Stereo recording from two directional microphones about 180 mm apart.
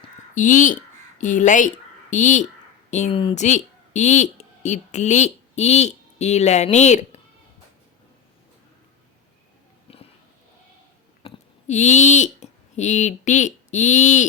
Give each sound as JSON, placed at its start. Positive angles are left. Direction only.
{"t": 0.3, "sound": "speech", "side_deg": 45}
{"t": 11.2, "sound": "a sound", "side_deg": 30}
{"t": 11.7, "sound": "speech", "side_deg": 40}